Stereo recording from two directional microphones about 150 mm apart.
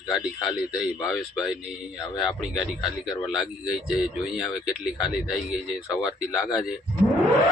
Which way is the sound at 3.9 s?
Centre (ahead or behind).